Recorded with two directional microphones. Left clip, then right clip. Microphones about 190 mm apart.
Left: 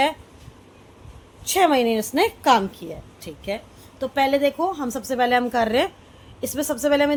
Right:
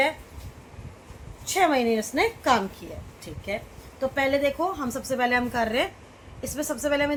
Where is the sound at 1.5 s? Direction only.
45° left (ahead or behind).